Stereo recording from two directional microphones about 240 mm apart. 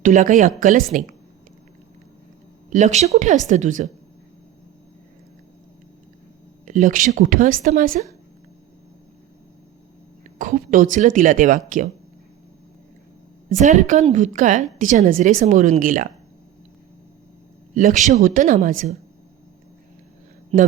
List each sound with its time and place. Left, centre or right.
0.0 s a woman's voice: right
2.6 s a woman's voice: right
6.7 s a woman's voice: right
10.3 s a woman's voice: right
13.5 s a woman's voice: right
17.7 s a woman's voice: right
20.5 s a man's voice: right